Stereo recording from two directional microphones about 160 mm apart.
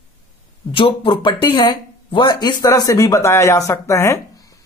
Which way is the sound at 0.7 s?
30° left (ahead or behind).